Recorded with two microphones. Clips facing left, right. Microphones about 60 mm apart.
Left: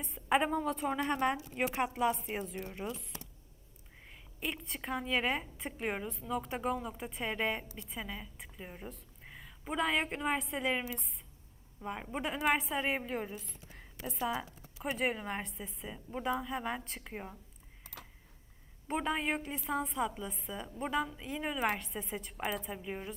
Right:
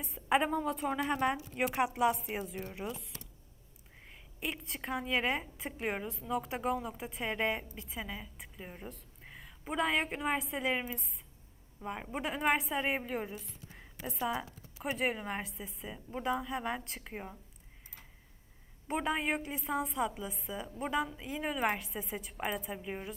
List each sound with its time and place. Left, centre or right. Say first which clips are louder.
0.0 s a woman's voice: even; centre
4.0 s a woman's voice: even; centre
14.4 s a sound: even; centre
14.9 s a woman's voice: even; centre
17.9 s a sound: left 7 dB; left
18.9 s a woman's voice: right 1 dB; centre